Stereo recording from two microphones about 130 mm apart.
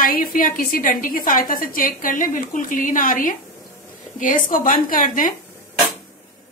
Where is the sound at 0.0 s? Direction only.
90° left.